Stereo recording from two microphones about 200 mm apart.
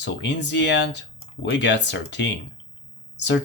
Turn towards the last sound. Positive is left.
turn(degrees=60)  # may be behind; listen again after turning